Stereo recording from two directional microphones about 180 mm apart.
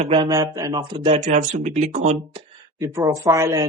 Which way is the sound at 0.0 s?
25° right (ahead or behind).